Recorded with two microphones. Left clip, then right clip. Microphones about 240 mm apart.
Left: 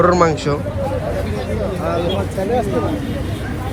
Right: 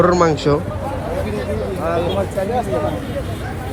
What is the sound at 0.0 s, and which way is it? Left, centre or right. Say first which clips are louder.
Speech: even; centre.